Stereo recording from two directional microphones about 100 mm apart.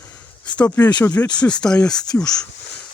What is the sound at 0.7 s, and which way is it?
Speech, 15° left (ahead or behind).